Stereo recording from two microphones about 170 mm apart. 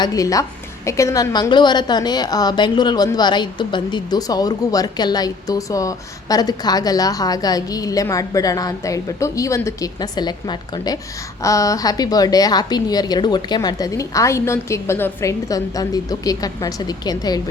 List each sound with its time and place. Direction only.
0.0 s a woman's voice: 20° left (ahead or behind)